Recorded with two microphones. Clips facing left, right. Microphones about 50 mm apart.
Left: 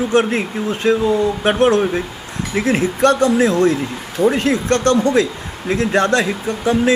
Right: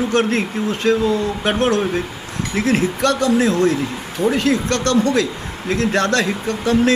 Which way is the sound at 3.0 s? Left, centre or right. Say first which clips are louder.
Left 6 dB; left.